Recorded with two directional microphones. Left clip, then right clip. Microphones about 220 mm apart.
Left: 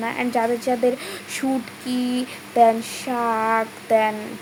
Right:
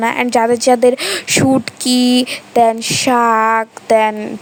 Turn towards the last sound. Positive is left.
turn(degrees=-45)  # may be behind; listen again after turning